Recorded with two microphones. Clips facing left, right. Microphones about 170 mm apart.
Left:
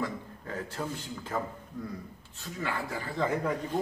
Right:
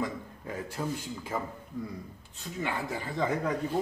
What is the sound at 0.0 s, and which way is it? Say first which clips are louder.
A man's voice: right 1 dB; 15° right (ahead or behind).